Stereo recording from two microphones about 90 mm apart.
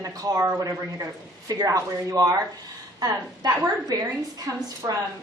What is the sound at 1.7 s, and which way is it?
A woman's voice, 40° right (ahead or behind).